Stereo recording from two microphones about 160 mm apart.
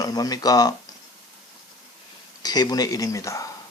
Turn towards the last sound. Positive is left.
turn(degrees=20)  # may be behind; listen again after turning